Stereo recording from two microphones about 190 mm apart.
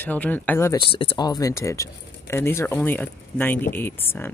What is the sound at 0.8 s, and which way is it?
Speech, 30° left (ahead or behind).